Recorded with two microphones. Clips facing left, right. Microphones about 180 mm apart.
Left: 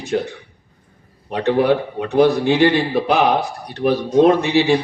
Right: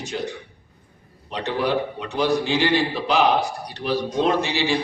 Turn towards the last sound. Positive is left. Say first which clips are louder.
# left 7 dB
turn(degrees=55)  # may be behind; listen again after turning